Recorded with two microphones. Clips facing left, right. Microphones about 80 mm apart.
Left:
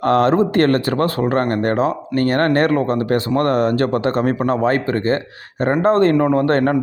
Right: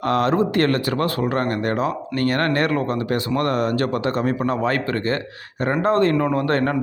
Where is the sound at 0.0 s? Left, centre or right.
Left.